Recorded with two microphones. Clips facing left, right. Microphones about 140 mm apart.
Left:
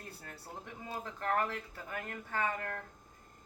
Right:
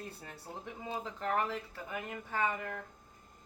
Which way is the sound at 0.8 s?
15° right (ahead or behind).